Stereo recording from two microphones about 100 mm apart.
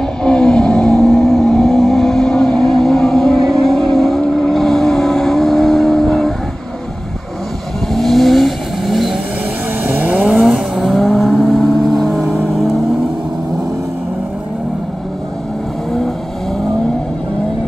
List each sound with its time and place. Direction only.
0.2 s vehicle: 5° left (ahead or behind)
7.9 s vehicle: centre (ahead or behind)
9.8 s vehicle: 15° right (ahead or behind)
10.3 s vehicle: centre (ahead or behind)